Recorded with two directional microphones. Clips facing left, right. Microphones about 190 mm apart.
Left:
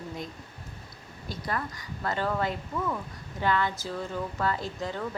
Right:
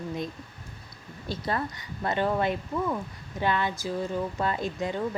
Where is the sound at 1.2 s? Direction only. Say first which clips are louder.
Right 3 dB; 25° right (ahead or behind).